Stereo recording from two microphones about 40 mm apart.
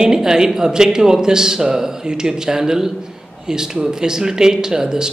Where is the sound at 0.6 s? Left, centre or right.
Centre.